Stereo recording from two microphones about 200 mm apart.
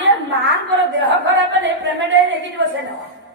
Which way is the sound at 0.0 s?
65° right (ahead or behind).